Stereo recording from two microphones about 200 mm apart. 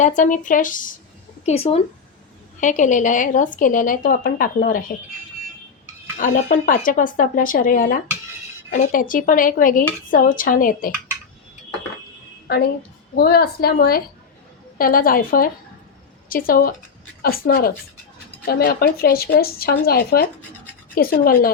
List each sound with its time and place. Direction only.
0.0 s speech: 40° left (ahead or behind)
1.5 s a woman's voice: 30° left (ahead or behind)
13.1 s a woman's voice: 50° left (ahead or behind)